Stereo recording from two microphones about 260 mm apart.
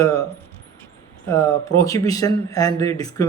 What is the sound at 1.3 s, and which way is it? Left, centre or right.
Speech, centre.